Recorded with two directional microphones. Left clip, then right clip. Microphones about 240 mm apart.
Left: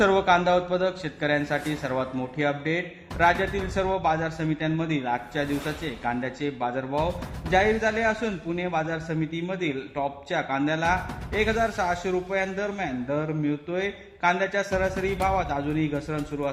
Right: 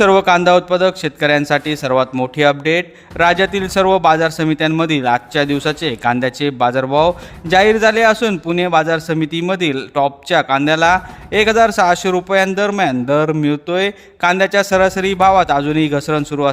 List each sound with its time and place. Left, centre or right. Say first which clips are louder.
0.0 s a man's voice: right 10 dB; right